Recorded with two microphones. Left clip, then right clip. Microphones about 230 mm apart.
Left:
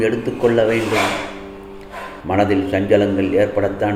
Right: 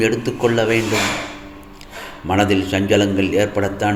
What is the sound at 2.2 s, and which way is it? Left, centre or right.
A man's voice, right.